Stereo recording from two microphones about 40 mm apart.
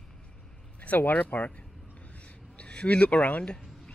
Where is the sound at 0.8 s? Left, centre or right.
Left.